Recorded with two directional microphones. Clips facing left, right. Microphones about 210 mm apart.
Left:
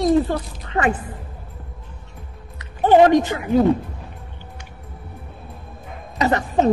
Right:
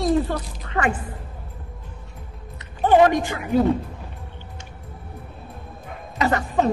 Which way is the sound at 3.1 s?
20° left (ahead or behind).